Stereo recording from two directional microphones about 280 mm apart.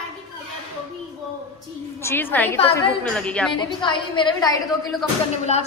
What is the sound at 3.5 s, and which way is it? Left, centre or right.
A woman's voice, centre.